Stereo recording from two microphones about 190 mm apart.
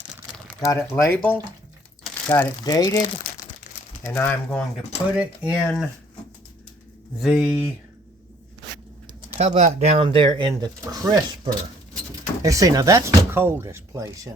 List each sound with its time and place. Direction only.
0.6 s speech: 15° left (ahead or behind)
5.1 s speech: 5° right (ahead or behind)
7.2 s speech: 5° right (ahead or behind)
9.4 s speech: 35° right (ahead or behind); by 14.1 s 15° right (ahead or behind)